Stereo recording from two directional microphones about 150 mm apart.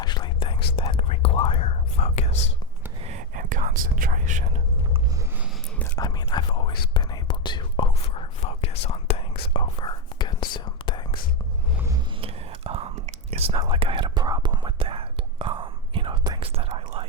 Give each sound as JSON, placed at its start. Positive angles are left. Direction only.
{"t": 0.0, "sound": "whispering", "side_deg": 30}
{"t": 3.0, "sound": "whispering", "side_deg": -55}
{"t": 6.0, "sound": "whispering", "side_deg": 30}
{"t": 12.2, "sound": "whispering", "side_deg": -40}
{"t": 16.5, "sound": "whispering", "side_deg": -40}